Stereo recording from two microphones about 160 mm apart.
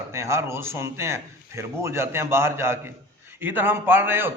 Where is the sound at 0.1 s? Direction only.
15° right (ahead or behind).